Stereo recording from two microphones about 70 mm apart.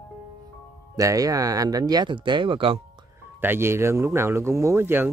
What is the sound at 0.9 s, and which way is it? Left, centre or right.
Speech, right.